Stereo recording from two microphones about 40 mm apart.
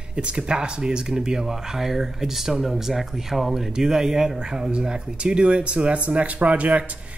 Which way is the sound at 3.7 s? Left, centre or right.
Centre.